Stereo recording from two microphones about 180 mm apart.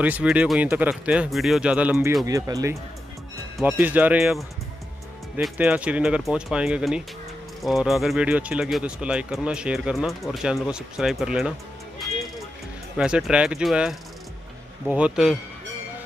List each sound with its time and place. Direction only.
0.0 s speech: 10° right (ahead or behind)
12.9 s speech: 5° right (ahead or behind)